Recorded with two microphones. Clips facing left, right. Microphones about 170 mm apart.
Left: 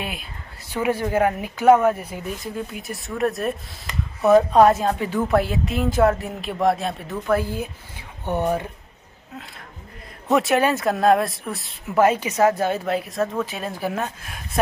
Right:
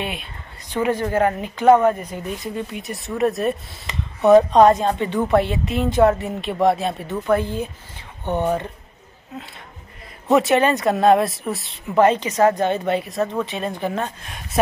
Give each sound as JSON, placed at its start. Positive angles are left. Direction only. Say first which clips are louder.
{"t": 0.0, "sound": "speech", "louder": "right 3 dB", "side_deg": 0}
{"t": 10.2, "sound": "speech", "louder": "right 3 dB", "side_deg": 0}